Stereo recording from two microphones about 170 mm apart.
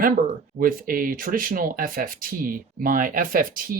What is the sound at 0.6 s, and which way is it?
Speech, 55° right (ahead or behind).